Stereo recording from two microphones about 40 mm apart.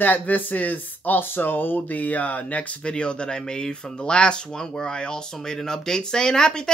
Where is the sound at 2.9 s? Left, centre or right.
Left.